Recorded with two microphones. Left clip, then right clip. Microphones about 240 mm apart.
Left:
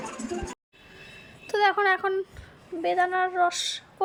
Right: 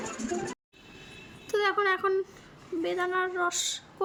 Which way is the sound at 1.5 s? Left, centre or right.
Centre.